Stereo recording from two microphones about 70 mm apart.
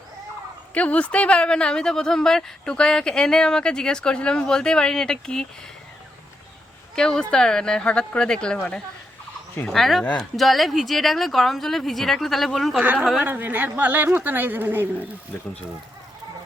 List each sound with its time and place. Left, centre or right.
0.7 s speech: centre
6.9 s speech: centre
9.6 s speech: centre
12.8 s a woman's voice: right